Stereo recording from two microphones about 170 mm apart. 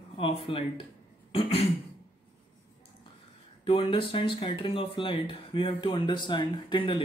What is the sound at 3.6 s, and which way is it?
Speech, 30° left (ahead or behind).